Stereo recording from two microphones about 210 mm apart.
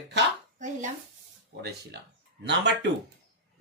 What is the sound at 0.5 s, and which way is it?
Speech, 35° right (ahead or behind).